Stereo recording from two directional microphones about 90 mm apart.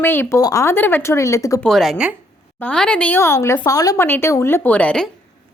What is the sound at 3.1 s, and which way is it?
Speech, 30° left (ahead or behind).